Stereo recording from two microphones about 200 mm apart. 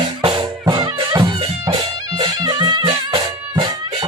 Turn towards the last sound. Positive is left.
turn(degrees=-25)  # may be behind; listen again after turning